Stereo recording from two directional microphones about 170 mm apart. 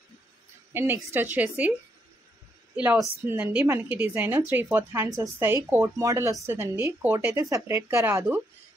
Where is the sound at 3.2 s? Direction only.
10° right (ahead or behind).